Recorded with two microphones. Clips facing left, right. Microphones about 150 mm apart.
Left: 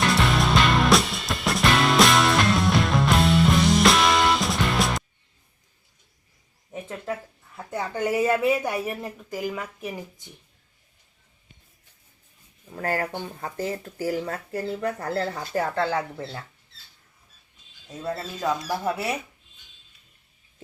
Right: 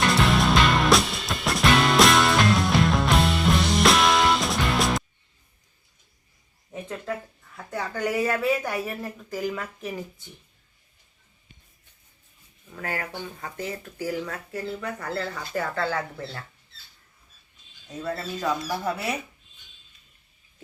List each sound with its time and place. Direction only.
0.1 s music: centre (ahead or behind)
7.5 s speech: 20° left (ahead or behind)
12.7 s speech: 40° left (ahead or behind); by 16.4 s 20° left (ahead or behind)
18.0 s speech: 20° left (ahead or behind)